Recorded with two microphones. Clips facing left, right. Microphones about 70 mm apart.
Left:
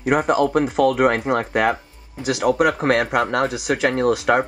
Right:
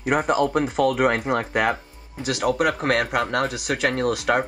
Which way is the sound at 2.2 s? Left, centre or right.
Centre.